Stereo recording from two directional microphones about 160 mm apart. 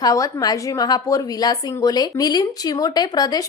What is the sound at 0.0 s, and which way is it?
A woman's voice, 20° left (ahead or behind).